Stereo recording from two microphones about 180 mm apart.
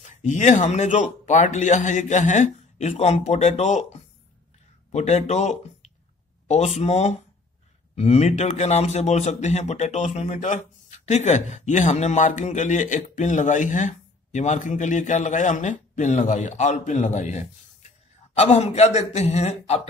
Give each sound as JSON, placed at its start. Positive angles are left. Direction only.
{"t": 0.2, "sound": "a man's voice", "side_deg": 45}